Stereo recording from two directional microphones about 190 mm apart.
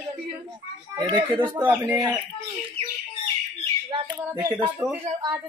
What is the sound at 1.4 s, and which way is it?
Speech, 15° right (ahead or behind).